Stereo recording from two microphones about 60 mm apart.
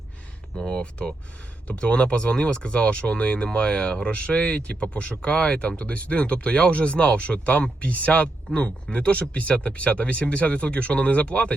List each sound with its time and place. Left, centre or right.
0.5 s speech: centre